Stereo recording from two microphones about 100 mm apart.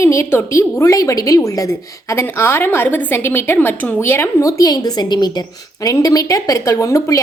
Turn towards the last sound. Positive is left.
turn(degrees=30)  # may be behind; listen again after turning